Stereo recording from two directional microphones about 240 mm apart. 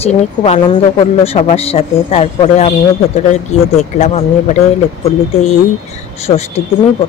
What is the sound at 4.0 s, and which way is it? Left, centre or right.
Speech, left.